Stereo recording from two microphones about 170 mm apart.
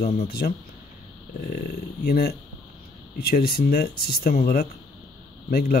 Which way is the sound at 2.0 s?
65° left (ahead or behind).